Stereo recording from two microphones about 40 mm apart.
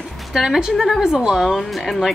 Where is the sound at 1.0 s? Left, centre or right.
Centre.